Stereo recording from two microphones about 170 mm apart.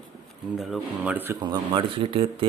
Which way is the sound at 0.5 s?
Centre (ahead or behind).